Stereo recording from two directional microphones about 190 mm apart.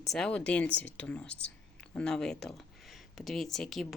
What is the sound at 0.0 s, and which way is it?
A woman's voice, 5° left (ahead or behind).